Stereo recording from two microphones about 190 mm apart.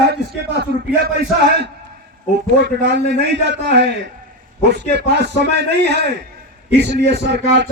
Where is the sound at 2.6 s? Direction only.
65° right (ahead or behind).